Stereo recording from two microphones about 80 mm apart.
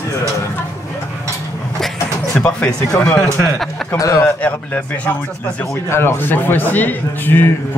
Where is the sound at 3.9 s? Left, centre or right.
Left.